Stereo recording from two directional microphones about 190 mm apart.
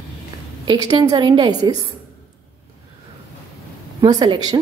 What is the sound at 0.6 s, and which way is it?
A woman's voice, 20° right (ahead or behind).